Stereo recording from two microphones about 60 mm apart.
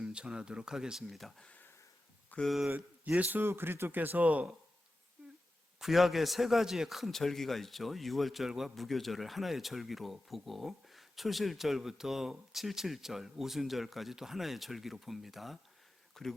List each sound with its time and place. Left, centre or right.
0.0 s speech: centre
2.3 s a sound: left
3.2 s speech: right
5.8 s a man's voice: centre